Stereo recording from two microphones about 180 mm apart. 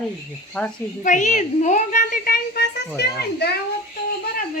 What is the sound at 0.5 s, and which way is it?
Speech, 10° left (ahead or behind).